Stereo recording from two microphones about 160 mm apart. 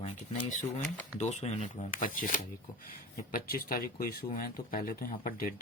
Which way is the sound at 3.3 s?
65° left (ahead or behind).